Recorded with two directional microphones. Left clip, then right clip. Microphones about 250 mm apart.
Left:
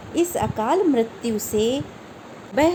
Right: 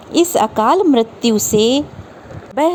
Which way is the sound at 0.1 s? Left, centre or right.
Right.